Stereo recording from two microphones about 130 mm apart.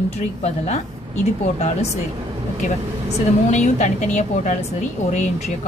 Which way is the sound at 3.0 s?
65° left (ahead or behind).